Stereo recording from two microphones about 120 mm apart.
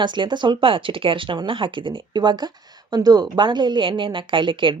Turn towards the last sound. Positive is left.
turn(degrees=-40)  # may be behind; listen again after turning